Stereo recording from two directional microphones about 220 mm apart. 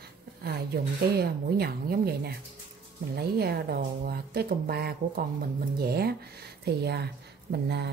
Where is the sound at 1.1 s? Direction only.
45° right (ahead or behind).